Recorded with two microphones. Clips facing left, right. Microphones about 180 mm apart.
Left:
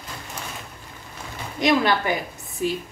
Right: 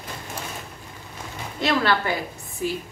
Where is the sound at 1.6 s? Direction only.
15° left (ahead or behind).